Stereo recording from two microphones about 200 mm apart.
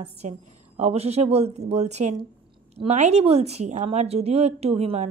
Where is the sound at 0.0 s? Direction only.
35° right (ahead or behind).